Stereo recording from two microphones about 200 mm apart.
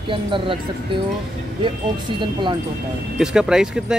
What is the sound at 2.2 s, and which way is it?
Speech, 25° right (ahead or behind).